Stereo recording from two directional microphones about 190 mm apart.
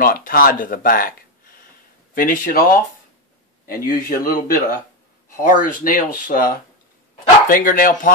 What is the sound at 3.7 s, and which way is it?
Speech, 50° left (ahead or behind).